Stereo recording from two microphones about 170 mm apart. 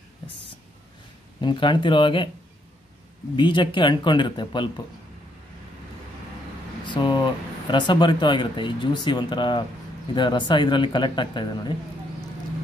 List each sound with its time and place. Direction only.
1.4 s speech: 25° left (ahead or behind)
3.3 s speech: 25° left (ahead or behind)
6.9 s speech: 25° left (ahead or behind)